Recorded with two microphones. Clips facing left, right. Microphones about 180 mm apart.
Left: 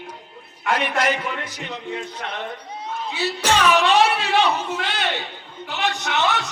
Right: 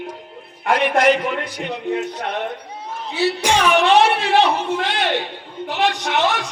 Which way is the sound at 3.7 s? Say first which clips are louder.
Right 6 dB; 55° right (ahead or behind).